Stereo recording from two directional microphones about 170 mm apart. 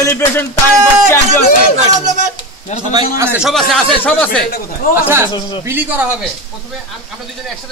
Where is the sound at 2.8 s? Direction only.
25° right (ahead or behind).